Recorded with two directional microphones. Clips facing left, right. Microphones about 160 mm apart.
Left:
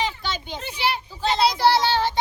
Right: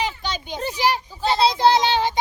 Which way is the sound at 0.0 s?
15° right (ahead or behind).